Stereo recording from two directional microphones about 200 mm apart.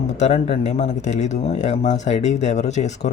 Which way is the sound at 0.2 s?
35° left (ahead or behind).